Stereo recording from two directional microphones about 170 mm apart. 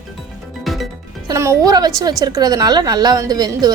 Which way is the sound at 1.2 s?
15° right (ahead or behind).